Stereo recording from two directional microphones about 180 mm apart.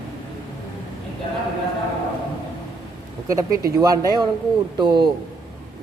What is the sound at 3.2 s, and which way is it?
A man's voice, 20° right (ahead or behind).